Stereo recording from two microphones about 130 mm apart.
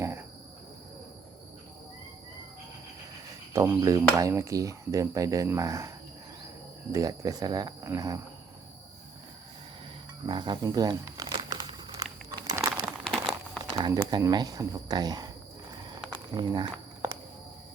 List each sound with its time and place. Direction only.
0.0 s cricket: 20° right (ahead or behind)
3.5 s speech: 20° right (ahead or behind)
6.9 s speech: 25° right (ahead or behind)
10.2 s speech: 35° right (ahead or behind)
11.4 s a sound: 25° right (ahead or behind)
12.8 s crumpling: 5° right (ahead or behind)
13.9 s speech: 30° right (ahead or behind)
15.8 s a sound: 30° right (ahead or behind)